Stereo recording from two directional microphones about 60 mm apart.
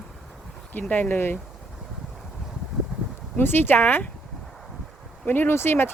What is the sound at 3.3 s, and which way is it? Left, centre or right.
Speech, left.